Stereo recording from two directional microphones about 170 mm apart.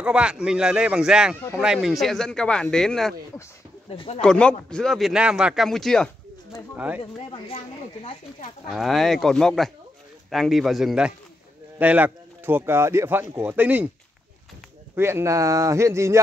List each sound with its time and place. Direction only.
0.0 s speech: 5° right (ahead or behind)
3.9 s speech: 35° left (ahead or behind)
4.2 s speech: 5° left (ahead or behind)
7.0 s speech: 35° left (ahead or behind)
8.6 s speech: centre (ahead or behind)
15.0 s speech: 15° right (ahead or behind)